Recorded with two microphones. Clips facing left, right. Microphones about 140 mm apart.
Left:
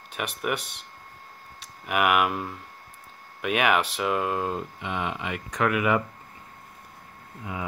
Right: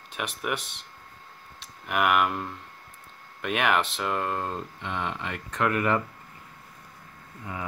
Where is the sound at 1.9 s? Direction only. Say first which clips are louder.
Left 1 dB; 5° left (ahead or behind).